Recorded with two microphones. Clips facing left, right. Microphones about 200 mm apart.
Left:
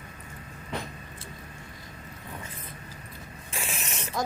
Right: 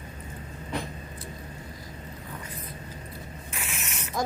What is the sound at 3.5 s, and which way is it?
Mechanisms, 30° left (ahead or behind).